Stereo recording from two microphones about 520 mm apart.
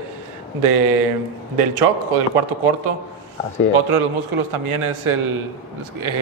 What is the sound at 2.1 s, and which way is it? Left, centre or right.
Speech, right.